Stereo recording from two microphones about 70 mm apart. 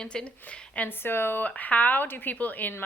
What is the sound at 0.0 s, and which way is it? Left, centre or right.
Speech, centre.